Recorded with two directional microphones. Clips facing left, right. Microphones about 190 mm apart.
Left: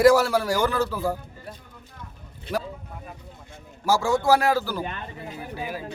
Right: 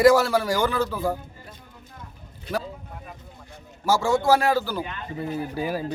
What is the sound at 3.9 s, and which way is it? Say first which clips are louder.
Speech: even; 10° left (ahead or behind).